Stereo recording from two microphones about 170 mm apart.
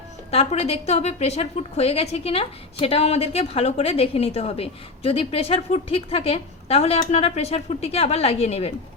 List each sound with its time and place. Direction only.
0.3 s a woman's voice: 40° left (ahead or behind)